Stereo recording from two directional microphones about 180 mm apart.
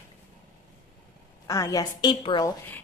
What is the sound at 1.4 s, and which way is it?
A woman's voice, 20° left (ahead or behind).